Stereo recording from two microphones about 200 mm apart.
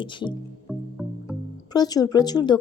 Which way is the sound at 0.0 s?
25° left (ahead or behind).